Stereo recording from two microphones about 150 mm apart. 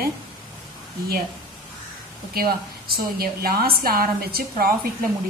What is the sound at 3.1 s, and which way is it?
A woman's voice, 90° right.